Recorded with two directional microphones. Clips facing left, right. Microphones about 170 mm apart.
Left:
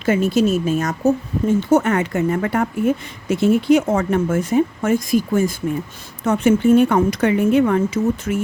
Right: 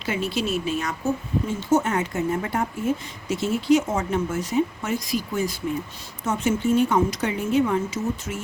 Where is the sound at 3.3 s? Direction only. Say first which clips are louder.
Left 6 dB; 55° left (ahead or behind).